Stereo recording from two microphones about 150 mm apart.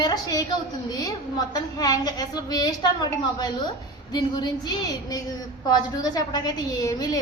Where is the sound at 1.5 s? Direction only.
25° left (ahead or behind).